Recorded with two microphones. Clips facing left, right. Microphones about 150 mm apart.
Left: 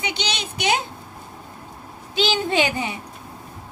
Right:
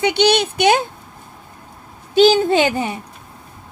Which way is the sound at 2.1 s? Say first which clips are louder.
Right 9 dB; 45° right (ahead or behind).